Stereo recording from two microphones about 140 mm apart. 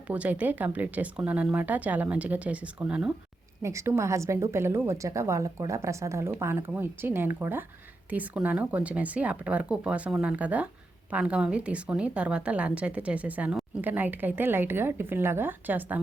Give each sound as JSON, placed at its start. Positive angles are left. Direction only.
{"t": 0.1, "sound": "speech", "side_deg": -10}
{"t": 3.6, "sound": "a woman's voice", "side_deg": -20}